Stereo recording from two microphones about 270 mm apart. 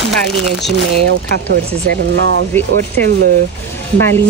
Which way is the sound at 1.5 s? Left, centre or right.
Right.